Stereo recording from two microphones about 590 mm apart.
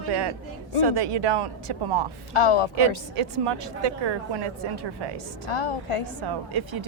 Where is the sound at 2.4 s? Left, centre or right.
Left.